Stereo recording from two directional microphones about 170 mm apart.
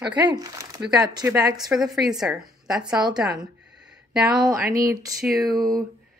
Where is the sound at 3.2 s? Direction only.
5° right (ahead or behind).